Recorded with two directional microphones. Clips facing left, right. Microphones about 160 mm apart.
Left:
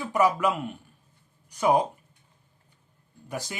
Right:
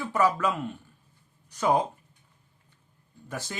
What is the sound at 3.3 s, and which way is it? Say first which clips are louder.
Speech: left 2 dB; 15° left (ahead or behind).